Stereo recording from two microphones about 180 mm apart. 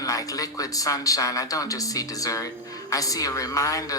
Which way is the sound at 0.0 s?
20° left (ahead or behind).